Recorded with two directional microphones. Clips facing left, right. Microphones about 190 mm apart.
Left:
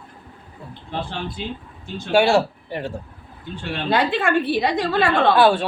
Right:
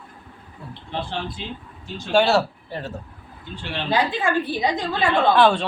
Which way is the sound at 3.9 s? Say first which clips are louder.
Left 2 dB; 65° left (ahead or behind).